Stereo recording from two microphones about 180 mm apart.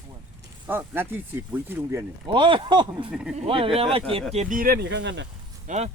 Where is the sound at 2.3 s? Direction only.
30° right (ahead or behind).